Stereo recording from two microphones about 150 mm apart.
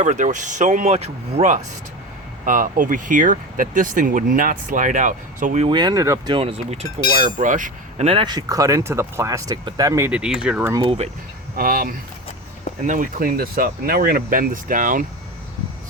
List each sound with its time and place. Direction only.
0.0 s speech: 55° right (ahead or behind)
2.4 s speech: 65° right (ahead or behind)
5.6 s speech: 30° right (ahead or behind); by 8.0 s 60° right (ahead or behind)
8.0 s speech: 35° right (ahead or behind)
10.1 s speech: 5° right (ahead or behind)
10.6 s speech: 20° right (ahead or behind)
10.8 s speech: 45° right (ahead or behind)
11.5 s speech: 75° right (ahead or behind)
12.8 s speech: 60° right (ahead or behind)